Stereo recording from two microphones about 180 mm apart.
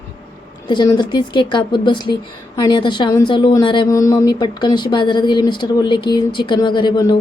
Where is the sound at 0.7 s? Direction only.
25° left (ahead or behind).